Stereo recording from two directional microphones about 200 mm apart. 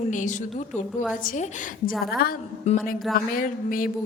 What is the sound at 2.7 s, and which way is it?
Speech, 35° left (ahead or behind).